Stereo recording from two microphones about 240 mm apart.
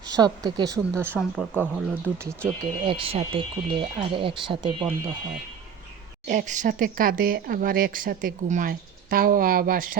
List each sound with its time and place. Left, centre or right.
0.1 s speech: centre
1.2 s speech: centre; by 4.7 s right
4.8 s speech: centre
6.2 s speech: right